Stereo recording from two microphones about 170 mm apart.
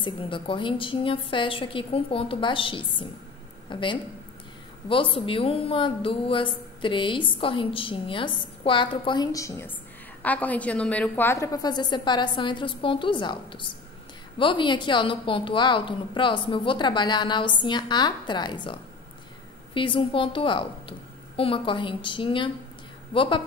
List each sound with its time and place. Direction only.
0.0 s a woman's voice: 30° left (ahead or behind)